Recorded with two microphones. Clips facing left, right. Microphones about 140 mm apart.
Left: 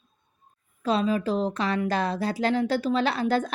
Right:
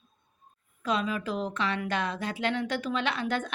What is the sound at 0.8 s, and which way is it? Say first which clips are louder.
A woman's voice: left 5 dB; 30° left (ahead or behind).